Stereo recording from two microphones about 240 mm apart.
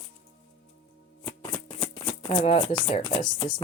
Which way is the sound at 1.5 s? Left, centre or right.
Centre.